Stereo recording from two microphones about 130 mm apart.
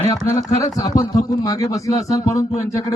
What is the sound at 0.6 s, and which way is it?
A man's voice, 30° left (ahead or behind).